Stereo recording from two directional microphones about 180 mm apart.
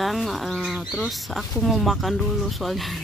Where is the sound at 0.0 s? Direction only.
Centre (ahead or behind).